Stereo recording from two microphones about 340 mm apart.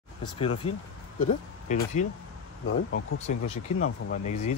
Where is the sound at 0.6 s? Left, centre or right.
Left.